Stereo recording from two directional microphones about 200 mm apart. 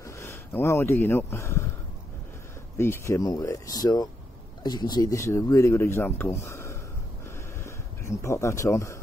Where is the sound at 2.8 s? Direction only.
15° left (ahead or behind).